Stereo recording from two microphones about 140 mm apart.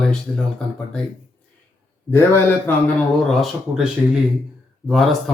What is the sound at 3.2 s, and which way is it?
Speech, centre (ahead or behind).